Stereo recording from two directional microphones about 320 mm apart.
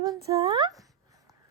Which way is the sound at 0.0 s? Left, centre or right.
Centre.